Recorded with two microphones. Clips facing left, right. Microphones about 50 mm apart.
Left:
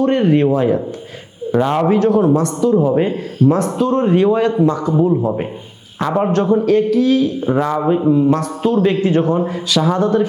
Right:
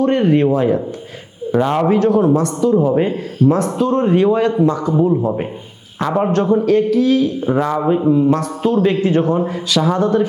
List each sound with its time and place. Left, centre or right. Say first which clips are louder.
0.0 s a man's voice: even; left